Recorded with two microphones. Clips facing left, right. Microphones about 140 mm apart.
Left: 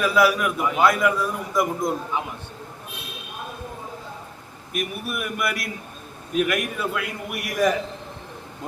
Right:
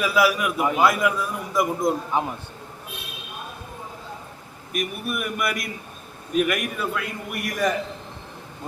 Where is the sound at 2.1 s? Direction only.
40° right (ahead or behind).